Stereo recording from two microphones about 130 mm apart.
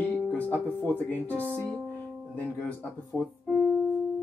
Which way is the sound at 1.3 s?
15° right (ahead or behind).